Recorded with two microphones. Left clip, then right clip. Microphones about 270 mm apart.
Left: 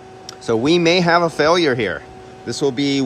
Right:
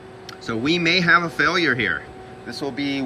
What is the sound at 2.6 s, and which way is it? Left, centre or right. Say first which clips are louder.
Speech: left 7 dB; left.